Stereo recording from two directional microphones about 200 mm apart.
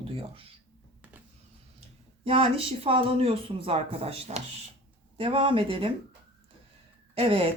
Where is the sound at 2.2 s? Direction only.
30° right (ahead or behind).